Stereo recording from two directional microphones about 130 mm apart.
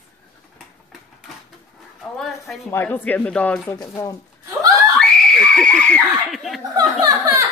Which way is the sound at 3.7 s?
30° left (ahead or behind).